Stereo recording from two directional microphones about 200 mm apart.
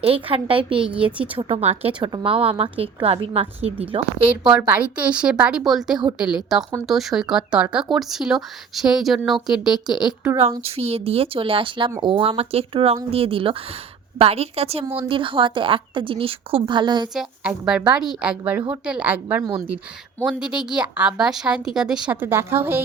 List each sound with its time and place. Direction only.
0.0 s a woman's voice: 30° right (ahead or behind)
4.5 s speech: 5° right (ahead or behind)
10.3 s a woman's voice: 30° right (ahead or behind)
17.2 s a woman's voice: centre (ahead or behind)